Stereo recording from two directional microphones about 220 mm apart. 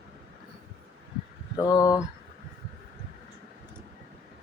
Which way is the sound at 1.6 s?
15° left (ahead or behind).